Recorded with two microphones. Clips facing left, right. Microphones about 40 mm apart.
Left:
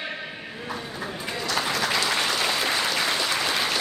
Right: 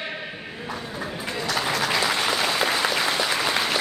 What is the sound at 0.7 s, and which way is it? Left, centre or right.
Applause, centre.